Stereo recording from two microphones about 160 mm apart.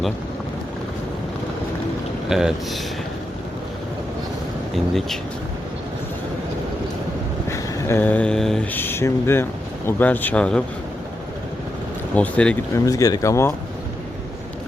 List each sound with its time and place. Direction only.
2.3 s speech: 5° right (ahead or behind)
7.4 s a sound: 15° left (ahead or behind)
12.1 s speech: 5° left (ahead or behind)
12.7 s speech: 20° left (ahead or behind)